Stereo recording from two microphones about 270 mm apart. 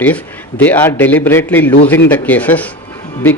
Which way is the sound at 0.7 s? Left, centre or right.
Centre.